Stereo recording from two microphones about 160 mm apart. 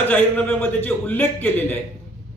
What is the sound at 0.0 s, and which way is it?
Speech, 10° left (ahead or behind).